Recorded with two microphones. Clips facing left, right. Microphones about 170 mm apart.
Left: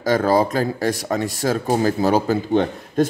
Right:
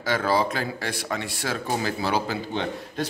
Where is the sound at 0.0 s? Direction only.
45° left (ahead or behind).